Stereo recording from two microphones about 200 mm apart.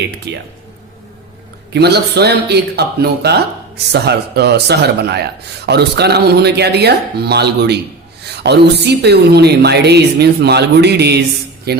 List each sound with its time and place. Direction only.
0.3 s a man's voice: 60° right (ahead or behind)
1.7 s a man's voice: 55° right (ahead or behind)